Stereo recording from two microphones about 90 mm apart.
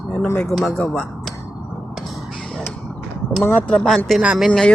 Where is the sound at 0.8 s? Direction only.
10° left (ahead or behind).